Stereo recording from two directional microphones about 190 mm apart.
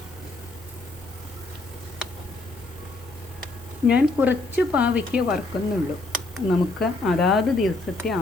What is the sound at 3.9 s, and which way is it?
A woman's voice, 10° right (ahead or behind).